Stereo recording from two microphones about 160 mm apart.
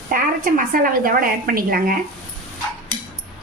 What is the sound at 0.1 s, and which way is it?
A woman's voice, 60° right (ahead or behind).